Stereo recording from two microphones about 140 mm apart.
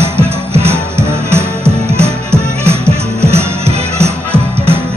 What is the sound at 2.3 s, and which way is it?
Music, 20° right (ahead or behind).